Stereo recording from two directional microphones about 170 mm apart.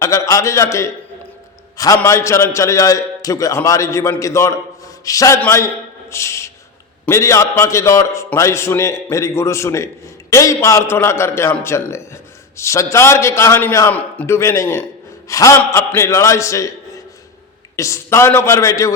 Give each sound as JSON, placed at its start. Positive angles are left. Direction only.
{"t": 0.0, "sound": "a man's voice", "side_deg": 20}
{"t": 1.7, "sound": "a sound", "side_deg": 20}
{"t": 2.0, "sound": "a man's voice", "side_deg": 15}